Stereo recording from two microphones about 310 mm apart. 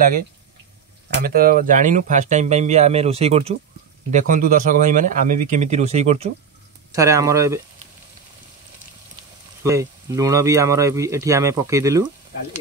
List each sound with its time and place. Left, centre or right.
1.2 s speech: right; by 7.6 s centre
9.6 s speech: centre